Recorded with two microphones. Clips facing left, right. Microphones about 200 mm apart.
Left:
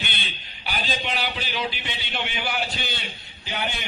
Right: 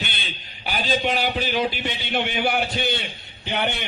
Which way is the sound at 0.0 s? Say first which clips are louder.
Right 2 dB; 45° right (ahead or behind).